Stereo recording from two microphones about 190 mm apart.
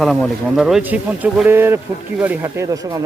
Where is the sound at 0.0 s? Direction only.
Centre (ahead or behind).